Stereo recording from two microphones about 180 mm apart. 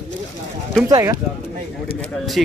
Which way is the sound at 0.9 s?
20° right (ahead or behind).